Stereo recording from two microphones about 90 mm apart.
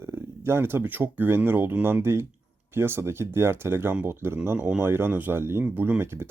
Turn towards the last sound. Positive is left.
turn(degrees=-25)  # may be behind; listen again after turning